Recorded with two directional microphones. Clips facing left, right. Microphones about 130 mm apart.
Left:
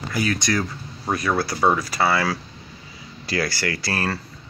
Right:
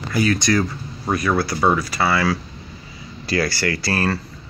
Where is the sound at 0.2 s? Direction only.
90° right.